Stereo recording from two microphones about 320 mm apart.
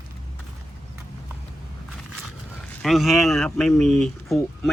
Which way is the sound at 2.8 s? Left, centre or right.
Centre.